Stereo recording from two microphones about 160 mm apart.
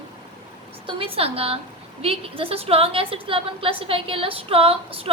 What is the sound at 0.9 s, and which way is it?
A woman's voice, 35° right (ahead or behind).